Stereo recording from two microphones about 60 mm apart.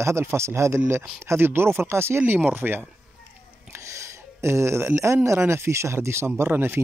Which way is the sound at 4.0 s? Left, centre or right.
Right.